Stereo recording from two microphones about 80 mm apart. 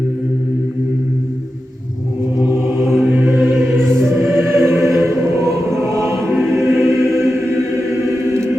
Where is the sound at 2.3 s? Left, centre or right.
Centre.